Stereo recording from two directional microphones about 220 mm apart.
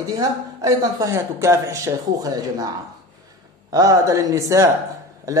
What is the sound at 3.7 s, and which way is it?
Speech, 15° right (ahead or behind).